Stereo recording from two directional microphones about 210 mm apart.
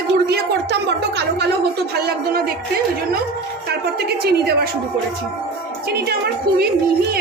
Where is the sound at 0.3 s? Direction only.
50° right (ahead or behind).